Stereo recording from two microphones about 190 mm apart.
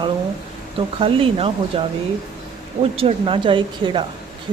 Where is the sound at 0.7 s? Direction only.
30° right (ahead or behind).